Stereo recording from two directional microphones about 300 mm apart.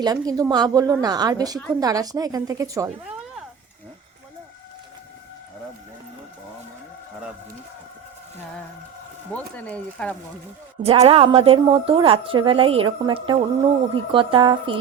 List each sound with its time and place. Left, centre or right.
0.0 s a woman's voice: centre
9.3 s speech: centre
10.8 s a woman's voice: centre